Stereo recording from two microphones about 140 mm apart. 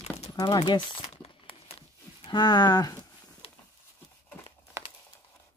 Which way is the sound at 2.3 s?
30° left (ahead or behind).